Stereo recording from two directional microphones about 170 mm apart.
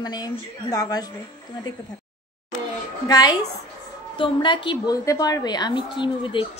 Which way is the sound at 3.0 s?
20° left (ahead or behind).